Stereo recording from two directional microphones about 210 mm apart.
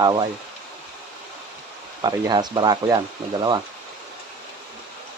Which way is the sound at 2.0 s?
20° right (ahead or behind).